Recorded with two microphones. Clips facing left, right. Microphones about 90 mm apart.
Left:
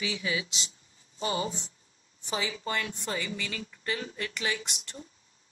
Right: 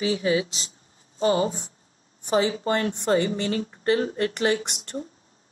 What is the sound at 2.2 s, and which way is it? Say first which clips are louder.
Speech: right 11 dB; 55° right (ahead or behind).